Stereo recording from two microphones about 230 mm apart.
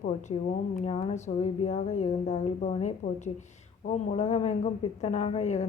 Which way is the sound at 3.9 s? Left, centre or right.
Left.